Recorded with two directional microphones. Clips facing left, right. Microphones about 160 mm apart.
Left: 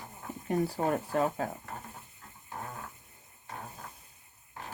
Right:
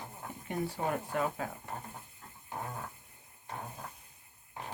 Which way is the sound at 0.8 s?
40° left (ahead or behind).